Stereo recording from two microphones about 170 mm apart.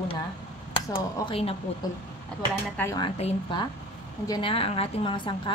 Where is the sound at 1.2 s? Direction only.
35° left (ahead or behind).